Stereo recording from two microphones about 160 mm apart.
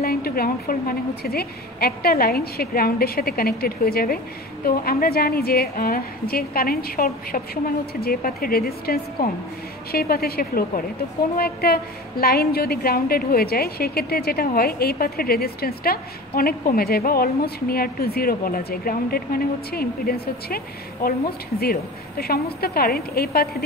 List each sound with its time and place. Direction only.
0.0 s a woman's voice: 70° left (ahead or behind)